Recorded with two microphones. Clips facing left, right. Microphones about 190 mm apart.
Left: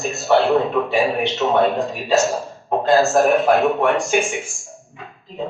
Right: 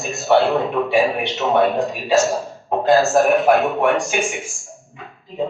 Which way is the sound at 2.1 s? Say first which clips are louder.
Right 1 dB; centre (ahead or behind).